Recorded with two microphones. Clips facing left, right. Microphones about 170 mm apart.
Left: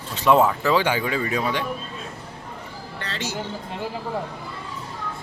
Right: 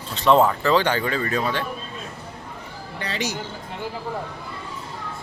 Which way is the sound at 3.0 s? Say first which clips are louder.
Right 3 dB; 15° right (ahead or behind).